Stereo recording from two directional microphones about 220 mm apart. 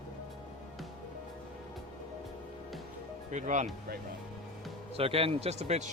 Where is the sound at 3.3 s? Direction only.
35° right (ahead or behind).